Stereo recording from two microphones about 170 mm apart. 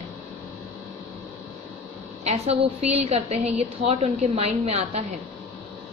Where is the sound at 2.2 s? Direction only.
35° right (ahead or behind).